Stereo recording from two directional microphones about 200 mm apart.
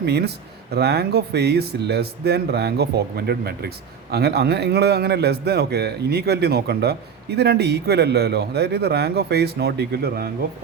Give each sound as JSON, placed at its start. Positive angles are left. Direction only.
{"t": 0.0, "sound": "a man's voice", "side_deg": -55}